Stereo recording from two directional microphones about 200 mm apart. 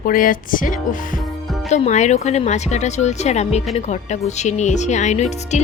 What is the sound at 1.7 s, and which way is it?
Speech, 35° left (ahead or behind).